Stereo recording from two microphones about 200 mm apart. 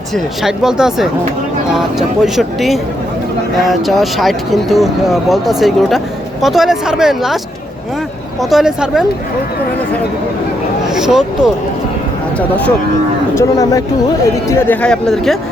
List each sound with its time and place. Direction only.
0.1 s speech: centre (ahead or behind)
8.4 s speech: centre (ahead or behind)
10.8 s speech: 5° right (ahead or behind)